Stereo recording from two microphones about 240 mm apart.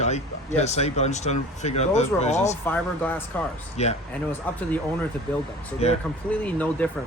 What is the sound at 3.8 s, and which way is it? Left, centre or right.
Speech, left.